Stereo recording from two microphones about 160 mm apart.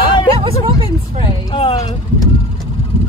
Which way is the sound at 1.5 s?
30° left (ahead or behind).